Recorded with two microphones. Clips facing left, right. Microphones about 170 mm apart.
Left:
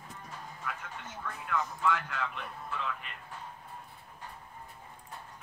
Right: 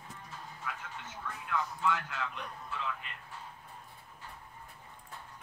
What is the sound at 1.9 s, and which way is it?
Speech, 55° left (ahead or behind).